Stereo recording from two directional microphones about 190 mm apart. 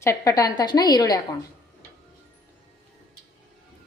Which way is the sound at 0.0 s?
15° left (ahead or behind).